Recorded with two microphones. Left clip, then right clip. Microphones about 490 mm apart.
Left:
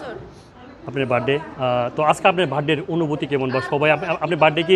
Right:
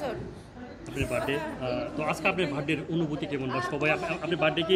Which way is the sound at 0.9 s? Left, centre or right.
Left.